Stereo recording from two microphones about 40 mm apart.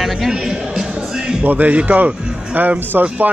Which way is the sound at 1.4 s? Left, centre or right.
Right.